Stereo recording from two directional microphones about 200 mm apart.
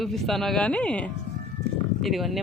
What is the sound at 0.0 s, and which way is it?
A woman's voice, centre (ahead or behind).